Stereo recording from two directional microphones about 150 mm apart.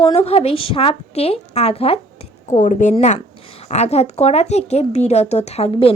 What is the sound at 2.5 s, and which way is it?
A woman's voice, 60° left (ahead or behind).